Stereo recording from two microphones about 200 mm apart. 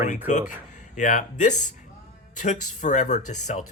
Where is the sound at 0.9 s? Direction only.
40° left (ahead or behind).